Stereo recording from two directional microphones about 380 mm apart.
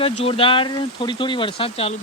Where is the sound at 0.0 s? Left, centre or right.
Centre.